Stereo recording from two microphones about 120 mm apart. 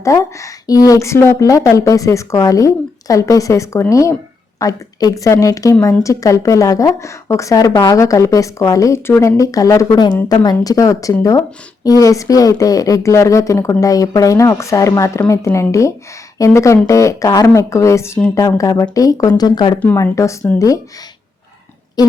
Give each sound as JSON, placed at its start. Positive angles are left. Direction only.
{"t": 0.0, "sound": "speech", "side_deg": 25}
{"t": 22.0, "sound": "speech", "side_deg": 35}